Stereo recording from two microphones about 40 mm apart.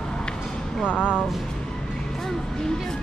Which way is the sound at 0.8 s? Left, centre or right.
Left.